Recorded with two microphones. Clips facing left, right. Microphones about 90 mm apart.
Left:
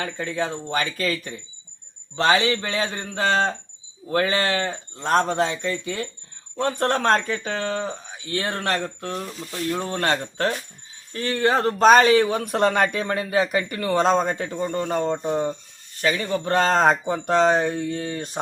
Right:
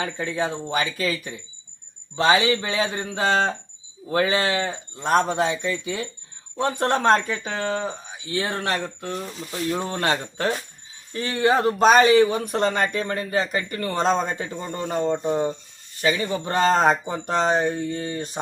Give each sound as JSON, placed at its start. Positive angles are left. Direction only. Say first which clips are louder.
{"t": 0.0, "sound": "a man's voice", "louder": "right 1 dB", "side_deg": -20}
{"t": 9.5, "sound": "a man's voice", "louder": "even", "side_deg": -15}